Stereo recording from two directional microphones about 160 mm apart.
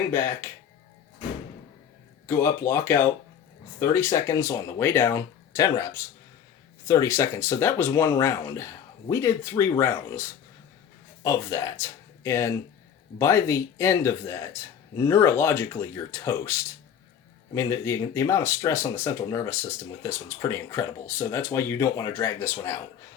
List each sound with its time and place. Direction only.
0.1 s speech: 15° left (ahead or behind)
2.2 s speech: 15° left (ahead or behind)